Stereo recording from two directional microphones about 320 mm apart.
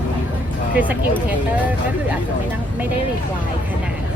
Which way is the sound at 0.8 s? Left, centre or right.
Centre.